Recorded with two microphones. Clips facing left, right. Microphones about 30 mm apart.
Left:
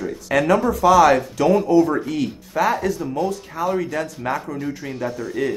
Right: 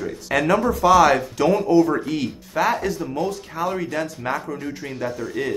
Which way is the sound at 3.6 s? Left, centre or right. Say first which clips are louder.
Left 2 dB; centre.